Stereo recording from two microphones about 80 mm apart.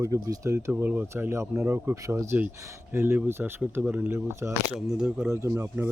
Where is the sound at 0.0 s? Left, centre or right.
Right.